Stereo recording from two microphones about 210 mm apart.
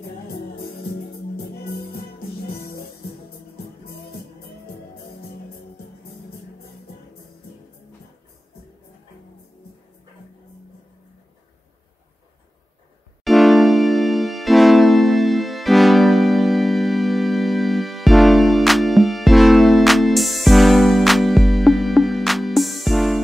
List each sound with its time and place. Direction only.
1.3 s music: 50° left (ahead or behind)
13.2 s electric piano: centre (ahead or behind)